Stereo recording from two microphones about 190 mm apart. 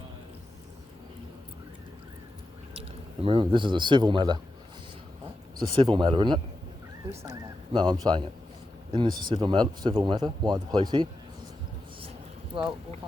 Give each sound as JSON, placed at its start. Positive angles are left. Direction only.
{"t": 3.2, "sound": "speech", "side_deg": -25}
{"t": 5.5, "sound": "speech", "side_deg": -25}
{"t": 7.7, "sound": "speech", "side_deg": -25}